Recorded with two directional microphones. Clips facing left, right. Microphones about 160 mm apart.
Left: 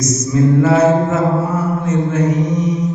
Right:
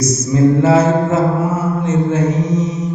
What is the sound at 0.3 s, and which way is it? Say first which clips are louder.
Speech: right 2 dB; 30° right (ahead or behind).